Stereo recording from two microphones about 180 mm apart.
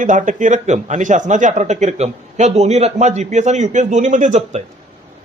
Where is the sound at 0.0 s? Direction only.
45° right (ahead or behind).